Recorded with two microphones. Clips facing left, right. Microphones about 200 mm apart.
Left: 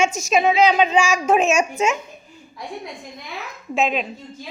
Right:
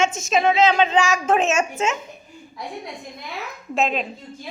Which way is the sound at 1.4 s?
25° right (ahead or behind).